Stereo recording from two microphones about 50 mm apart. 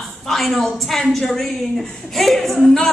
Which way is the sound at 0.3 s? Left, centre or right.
Centre.